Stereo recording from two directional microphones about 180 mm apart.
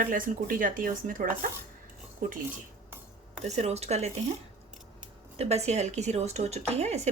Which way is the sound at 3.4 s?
35° right (ahead or behind).